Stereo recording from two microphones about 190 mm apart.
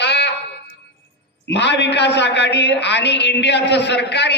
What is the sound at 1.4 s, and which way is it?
A man's voice, 65° left (ahead or behind).